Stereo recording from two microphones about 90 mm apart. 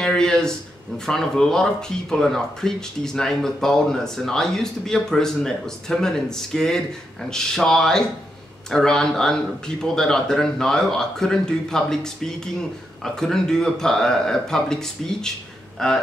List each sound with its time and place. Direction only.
0.0 s a man's voice: 5° left (ahead or behind)